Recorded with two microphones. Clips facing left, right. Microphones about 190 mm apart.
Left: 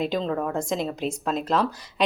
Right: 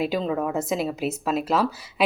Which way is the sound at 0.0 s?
5° right (ahead or behind).